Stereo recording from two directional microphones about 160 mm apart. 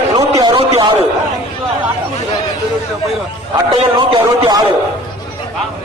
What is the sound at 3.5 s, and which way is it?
A man's voice, 30° right (ahead or behind).